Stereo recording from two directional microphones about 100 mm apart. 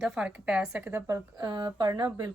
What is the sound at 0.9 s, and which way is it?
Speech, 35° right (ahead or behind).